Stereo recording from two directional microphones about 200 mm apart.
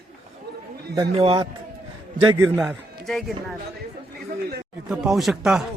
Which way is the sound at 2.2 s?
15° right (ahead or behind).